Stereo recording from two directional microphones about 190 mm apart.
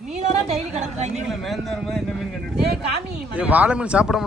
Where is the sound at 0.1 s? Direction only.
40° right (ahead or behind).